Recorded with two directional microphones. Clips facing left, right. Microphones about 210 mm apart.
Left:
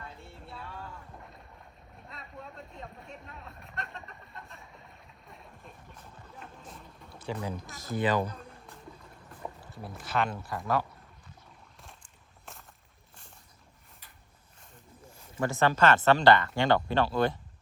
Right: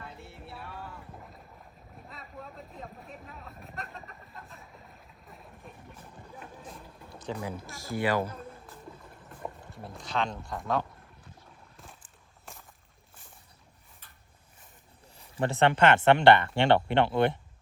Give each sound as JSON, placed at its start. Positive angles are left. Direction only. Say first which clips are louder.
{"t": 0.6, "sound": "boat", "louder": "even", "side_deg": -5}
{"t": 2.0, "sound": "a sound", "louder": "even", "side_deg": 0}
{"t": 6.5, "sound": "boat", "louder": "right 3 dB", "side_deg": 0}
{"t": 7.2, "sound": "speech", "louder": "even", "side_deg": 10}
{"t": 8.4, "sound": "music", "louder": "right 4 dB", "side_deg": 0}
{"t": 9.7, "sound": "speech", "louder": "left 2 dB", "side_deg": 0}
{"t": 11.8, "sound": "a sound", "louder": "right 2 dB", "side_deg": 0}
{"t": 15.4, "sound": "speech", "louder": "right 2 dB", "side_deg": -30}